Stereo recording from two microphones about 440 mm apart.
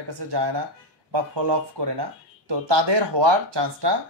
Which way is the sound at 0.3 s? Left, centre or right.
Right.